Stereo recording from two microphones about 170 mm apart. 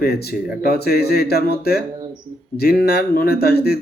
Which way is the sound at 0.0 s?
65° left (ahead or behind).